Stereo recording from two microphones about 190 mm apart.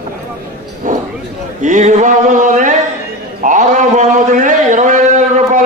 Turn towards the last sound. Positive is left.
turn(degrees=-40)  # may be behind; listen again after turning